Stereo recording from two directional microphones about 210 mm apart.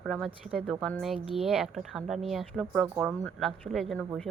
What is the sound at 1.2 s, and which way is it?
Speech, 25° right (ahead or behind).